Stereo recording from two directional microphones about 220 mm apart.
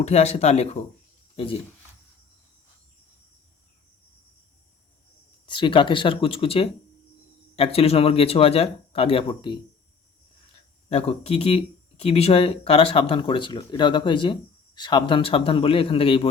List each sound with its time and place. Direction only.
0.0 s speech: 30° left (ahead or behind)
5.5 s speech: 20° left (ahead or behind)
10.8 s speech: 25° left (ahead or behind)